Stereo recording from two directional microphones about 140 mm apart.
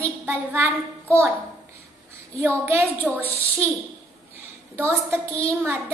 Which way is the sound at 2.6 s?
20° right (ahead or behind).